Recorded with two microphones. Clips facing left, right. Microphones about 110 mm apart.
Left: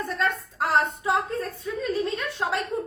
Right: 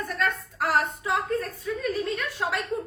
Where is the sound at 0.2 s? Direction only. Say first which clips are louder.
Even; 25° left (ahead or behind).